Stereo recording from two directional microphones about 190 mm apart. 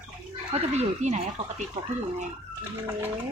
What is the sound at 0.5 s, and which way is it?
Speech, 35° right (ahead or behind).